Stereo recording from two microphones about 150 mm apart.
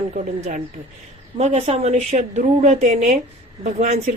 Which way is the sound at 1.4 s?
45° right (ahead or behind).